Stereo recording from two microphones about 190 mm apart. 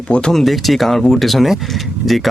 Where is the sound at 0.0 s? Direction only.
5° left (ahead or behind).